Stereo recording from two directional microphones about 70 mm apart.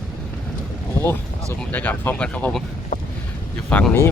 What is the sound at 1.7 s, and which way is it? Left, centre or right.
Speech, left.